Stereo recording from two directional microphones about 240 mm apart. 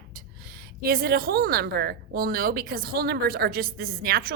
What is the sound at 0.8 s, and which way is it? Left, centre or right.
A woman's voice, right.